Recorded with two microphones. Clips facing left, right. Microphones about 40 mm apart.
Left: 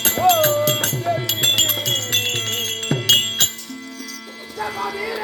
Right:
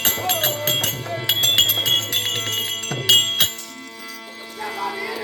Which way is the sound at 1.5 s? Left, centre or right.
Right.